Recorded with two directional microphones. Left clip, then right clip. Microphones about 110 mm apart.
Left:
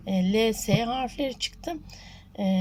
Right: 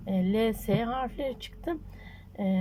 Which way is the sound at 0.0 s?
15° left (ahead or behind).